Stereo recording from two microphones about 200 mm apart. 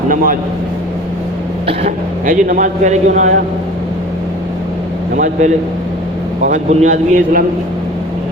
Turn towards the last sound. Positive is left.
turn(degrees=-35)  # may be behind; listen again after turning